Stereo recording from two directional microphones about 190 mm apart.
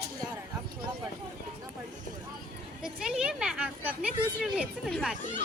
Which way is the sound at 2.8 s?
5° right (ahead or behind).